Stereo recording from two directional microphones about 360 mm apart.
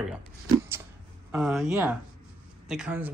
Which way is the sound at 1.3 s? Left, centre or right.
Centre.